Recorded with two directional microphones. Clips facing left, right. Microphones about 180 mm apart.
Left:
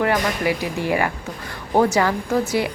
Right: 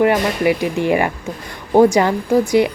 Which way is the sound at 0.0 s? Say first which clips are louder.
Right 5 dB; 20° right (ahead or behind).